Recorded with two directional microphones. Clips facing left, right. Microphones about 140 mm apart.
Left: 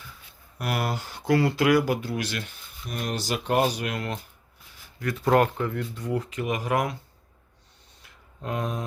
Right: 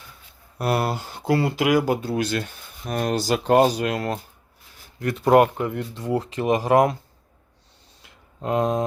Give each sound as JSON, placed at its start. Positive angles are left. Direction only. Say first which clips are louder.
{"t": 0.6, "sound": "speech", "louder": "right 6 dB", "side_deg": -30}
{"t": 0.9, "sound": "speech", "louder": "right 1 dB", "side_deg": -15}
{"t": 2.4, "sound": "speech", "louder": "right 5 dB", "side_deg": -45}
{"t": 4.9, "sound": "speech", "louder": "right 5 dB", "side_deg": -25}
{"t": 8.4, "sound": "speech", "louder": "right 8 dB", "side_deg": -30}